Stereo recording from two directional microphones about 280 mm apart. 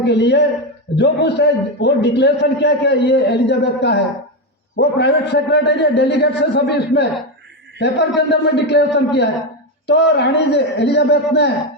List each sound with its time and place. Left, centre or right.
0.0 s a man's voice: left